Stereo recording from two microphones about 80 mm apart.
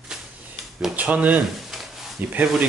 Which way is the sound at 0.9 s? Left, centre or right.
Centre.